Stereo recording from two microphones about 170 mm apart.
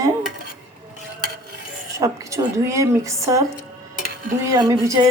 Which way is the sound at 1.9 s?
15° right (ahead or behind).